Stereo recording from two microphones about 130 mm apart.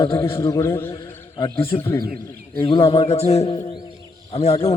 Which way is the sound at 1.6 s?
45° left (ahead or behind).